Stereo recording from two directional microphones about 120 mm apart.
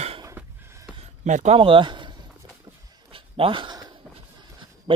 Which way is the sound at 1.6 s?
45° right (ahead or behind).